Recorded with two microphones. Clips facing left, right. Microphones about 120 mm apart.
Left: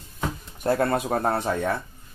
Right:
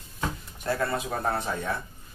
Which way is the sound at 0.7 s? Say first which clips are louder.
Left 6 dB; 55° left (ahead or behind).